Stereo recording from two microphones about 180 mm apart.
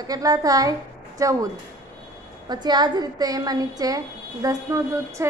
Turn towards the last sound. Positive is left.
turn(degrees=-20)  # may be behind; listen again after turning